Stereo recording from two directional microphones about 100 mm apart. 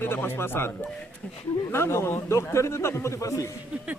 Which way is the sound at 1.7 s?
25° left (ahead or behind).